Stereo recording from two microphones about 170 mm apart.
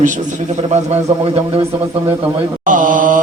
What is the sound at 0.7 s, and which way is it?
Speech, 35° right (ahead or behind).